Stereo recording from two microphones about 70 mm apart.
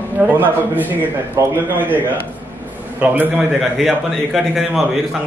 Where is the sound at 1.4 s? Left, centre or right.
Right.